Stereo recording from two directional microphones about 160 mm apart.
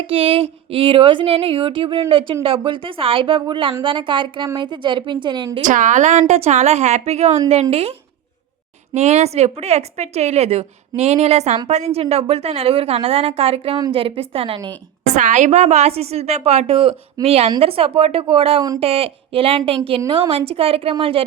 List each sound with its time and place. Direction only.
0.0 s a woman's voice: 35° right (ahead or behind)
5.6 s a woman's voice: 55° right (ahead or behind); by 14.7 s 35° right (ahead or behind)
15.0 s a woman's voice: 45° right (ahead or behind)